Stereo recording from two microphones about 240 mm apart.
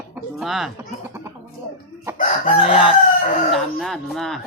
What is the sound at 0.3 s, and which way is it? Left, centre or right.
Speech, centre.